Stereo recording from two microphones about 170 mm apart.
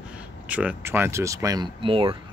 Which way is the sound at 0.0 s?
5° right (ahead or behind).